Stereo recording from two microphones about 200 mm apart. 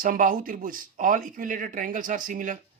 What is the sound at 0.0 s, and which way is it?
Speech, 40° right (ahead or behind).